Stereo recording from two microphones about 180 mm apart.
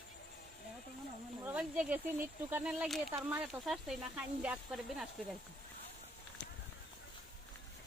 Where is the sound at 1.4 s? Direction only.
10° right (ahead or behind).